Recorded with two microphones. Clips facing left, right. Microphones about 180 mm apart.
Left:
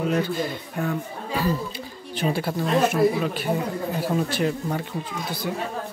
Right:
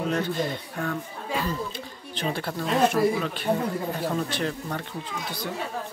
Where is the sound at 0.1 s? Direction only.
5° left (ahead or behind).